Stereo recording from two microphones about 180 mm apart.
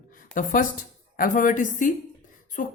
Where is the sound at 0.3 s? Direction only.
50° left (ahead or behind).